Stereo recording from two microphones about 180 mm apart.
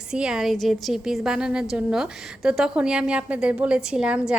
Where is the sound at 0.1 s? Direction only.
5° right (ahead or behind).